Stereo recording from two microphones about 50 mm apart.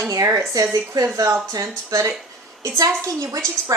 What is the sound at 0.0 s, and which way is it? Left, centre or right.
A woman's voice, right.